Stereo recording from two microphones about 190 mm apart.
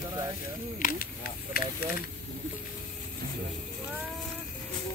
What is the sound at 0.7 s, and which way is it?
Speech, 45° left (ahead or behind).